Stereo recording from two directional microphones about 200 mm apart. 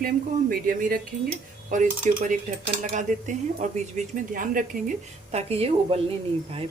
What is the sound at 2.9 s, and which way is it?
Speech, 40° right (ahead or behind).